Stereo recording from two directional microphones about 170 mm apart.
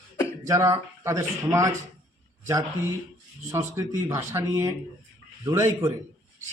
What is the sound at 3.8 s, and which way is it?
A man's voice, 15° right (ahead or behind).